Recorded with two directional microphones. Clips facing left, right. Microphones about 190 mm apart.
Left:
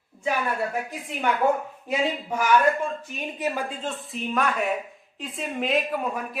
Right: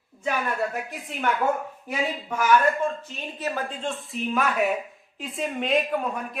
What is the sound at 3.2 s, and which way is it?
A man's voice, 15° left (ahead or behind).